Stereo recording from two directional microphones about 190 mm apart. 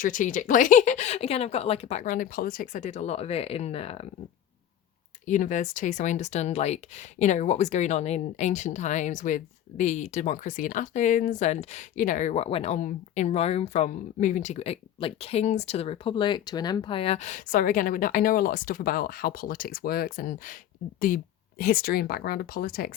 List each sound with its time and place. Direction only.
0.0 s speech: 45° left (ahead or behind)
5.2 s speech: 40° left (ahead or behind)